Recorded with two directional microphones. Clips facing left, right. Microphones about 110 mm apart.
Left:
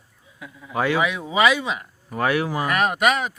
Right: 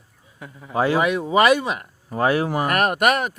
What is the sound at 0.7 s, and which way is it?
Speech, 35° right (ahead or behind).